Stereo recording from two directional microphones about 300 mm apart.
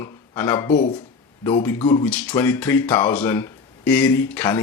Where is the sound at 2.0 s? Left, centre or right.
Centre.